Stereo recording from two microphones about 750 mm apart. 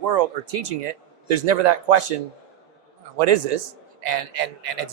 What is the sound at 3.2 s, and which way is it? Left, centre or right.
A man's voice, right.